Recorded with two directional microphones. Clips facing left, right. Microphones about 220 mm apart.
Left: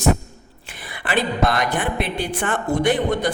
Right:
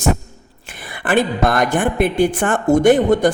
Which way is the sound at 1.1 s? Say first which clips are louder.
Right 4 dB; 50° right (ahead or behind).